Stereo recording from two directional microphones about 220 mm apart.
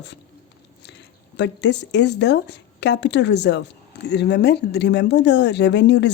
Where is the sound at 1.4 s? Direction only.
50° left (ahead or behind).